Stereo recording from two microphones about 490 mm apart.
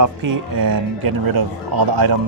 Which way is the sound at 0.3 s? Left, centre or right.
Right.